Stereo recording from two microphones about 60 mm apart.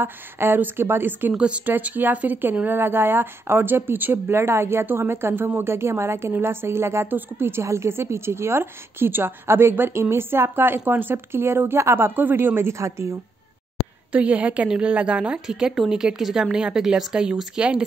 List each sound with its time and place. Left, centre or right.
0.0 s speech: right
1.3 s a woman's voice: centre
1.7 s a woman's voice: right
7.6 s a woman's voice: right
12.7 s a woman's voice: right
14.1 s a woman's voice: right